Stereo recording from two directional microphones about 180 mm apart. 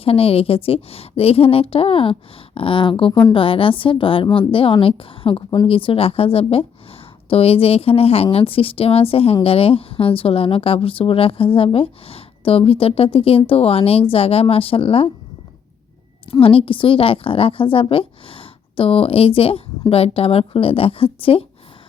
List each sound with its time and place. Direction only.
0.0 s a woman's voice: 30° left (ahead or behind)
16.3 s a woman's voice: 30° left (ahead or behind)